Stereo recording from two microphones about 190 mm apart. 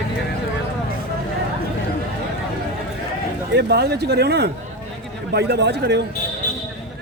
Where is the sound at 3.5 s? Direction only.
60° right (ahead or behind).